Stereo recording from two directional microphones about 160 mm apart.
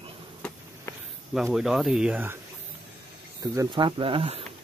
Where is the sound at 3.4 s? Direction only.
20° right (ahead or behind).